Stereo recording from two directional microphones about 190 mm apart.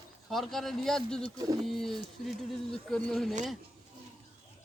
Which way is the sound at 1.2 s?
20° right (ahead or behind).